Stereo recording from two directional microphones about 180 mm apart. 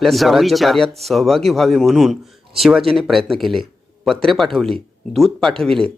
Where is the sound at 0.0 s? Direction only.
Centre (ahead or behind).